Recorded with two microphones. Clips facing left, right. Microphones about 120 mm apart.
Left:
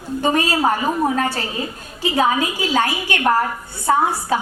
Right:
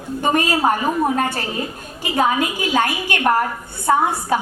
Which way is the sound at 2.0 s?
50° right (ahead or behind).